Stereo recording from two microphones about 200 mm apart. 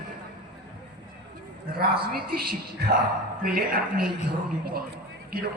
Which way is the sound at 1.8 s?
50° right (ahead or behind).